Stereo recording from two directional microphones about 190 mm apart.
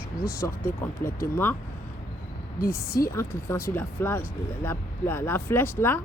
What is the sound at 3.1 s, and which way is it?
Speech, 15° left (ahead or behind).